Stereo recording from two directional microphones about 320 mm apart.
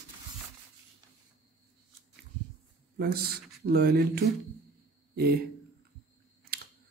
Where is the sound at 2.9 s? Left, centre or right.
Right.